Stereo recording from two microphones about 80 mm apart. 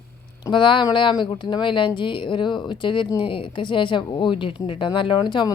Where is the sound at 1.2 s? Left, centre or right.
Left.